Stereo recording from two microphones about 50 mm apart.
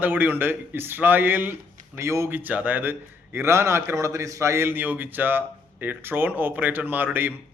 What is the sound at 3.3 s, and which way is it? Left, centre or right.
A man's voice, right.